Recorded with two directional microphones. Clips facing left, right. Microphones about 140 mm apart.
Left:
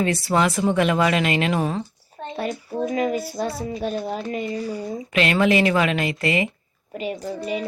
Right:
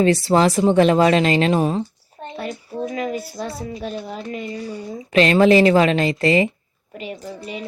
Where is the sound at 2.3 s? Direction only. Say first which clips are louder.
Left 2 dB; 30° left (ahead or behind).